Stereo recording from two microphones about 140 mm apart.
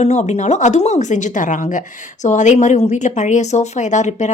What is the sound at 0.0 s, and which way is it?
Speech, 55° left (ahead or behind).